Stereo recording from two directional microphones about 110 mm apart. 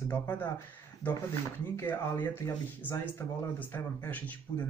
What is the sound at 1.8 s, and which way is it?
Speech, 20° left (ahead or behind).